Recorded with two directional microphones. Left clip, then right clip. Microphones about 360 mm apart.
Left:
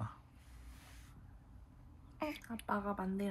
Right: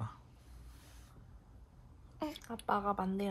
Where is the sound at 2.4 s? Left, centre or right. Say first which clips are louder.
Right 8 dB; right.